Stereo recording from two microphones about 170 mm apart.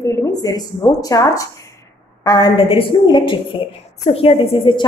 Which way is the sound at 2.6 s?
30° left (ahead or behind).